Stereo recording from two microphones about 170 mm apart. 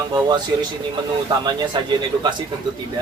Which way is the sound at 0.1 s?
25° right (ahead or behind).